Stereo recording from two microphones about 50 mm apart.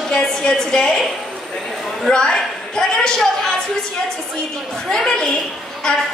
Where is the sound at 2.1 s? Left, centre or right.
Centre.